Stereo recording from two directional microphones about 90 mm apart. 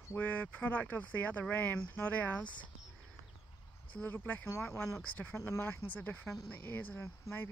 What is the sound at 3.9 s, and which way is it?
Speech, 20° left (ahead or behind).